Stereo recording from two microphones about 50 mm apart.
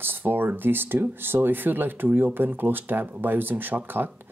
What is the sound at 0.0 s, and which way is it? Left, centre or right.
Speech, right.